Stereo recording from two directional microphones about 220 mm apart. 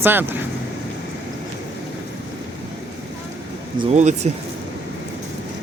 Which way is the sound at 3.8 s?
30° right (ahead or behind).